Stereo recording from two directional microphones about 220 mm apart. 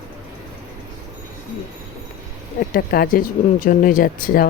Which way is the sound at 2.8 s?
45° left (ahead or behind).